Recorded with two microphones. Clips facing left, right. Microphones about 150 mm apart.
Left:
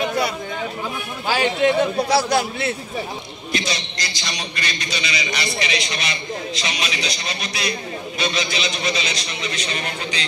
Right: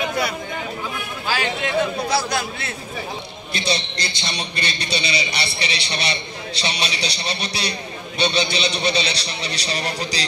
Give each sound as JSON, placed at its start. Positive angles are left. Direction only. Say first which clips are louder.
{"t": 1.2, "sound": "a man's voice", "louder": "left 6 dB", "side_deg": 20}
{"t": 3.5, "sound": "a man's voice", "louder": "right 1 dB", "side_deg": -30}